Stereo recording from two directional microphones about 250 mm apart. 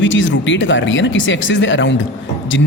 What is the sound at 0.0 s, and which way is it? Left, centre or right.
A man's voice, left.